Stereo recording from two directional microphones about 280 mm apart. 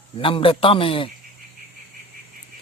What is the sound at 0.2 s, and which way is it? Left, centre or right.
Speech, centre.